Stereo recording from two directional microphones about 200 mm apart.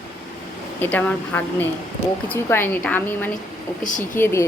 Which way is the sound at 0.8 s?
10° left (ahead or behind).